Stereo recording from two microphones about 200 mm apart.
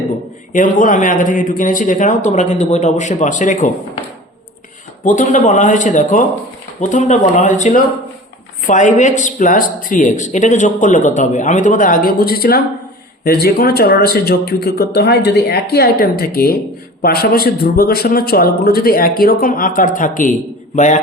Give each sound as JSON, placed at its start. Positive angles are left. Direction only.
{"t": 0.5, "sound": "speech", "side_deg": 40}
{"t": 5.0, "sound": "speech", "side_deg": 40}